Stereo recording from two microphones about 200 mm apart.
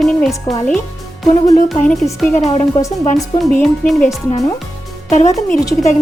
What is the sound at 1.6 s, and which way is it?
Speech, centre (ahead or behind).